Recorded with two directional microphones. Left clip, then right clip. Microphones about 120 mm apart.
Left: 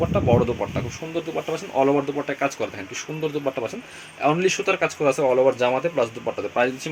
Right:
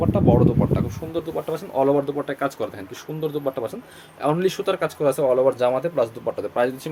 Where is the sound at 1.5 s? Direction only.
15° right (ahead or behind).